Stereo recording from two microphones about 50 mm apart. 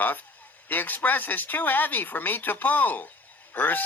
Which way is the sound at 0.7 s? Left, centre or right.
Left.